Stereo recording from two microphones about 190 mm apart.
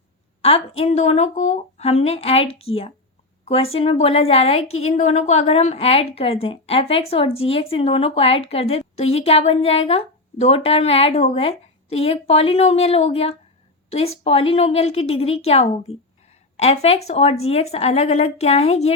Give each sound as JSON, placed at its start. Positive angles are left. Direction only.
{"t": 0.4, "sound": "a woman's voice", "side_deg": 30}